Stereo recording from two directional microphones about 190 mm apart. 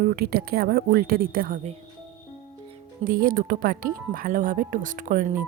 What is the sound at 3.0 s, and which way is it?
Speech, 50° right (ahead or behind).